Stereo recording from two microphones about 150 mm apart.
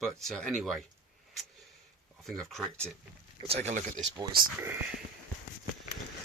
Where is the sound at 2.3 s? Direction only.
Centre (ahead or behind).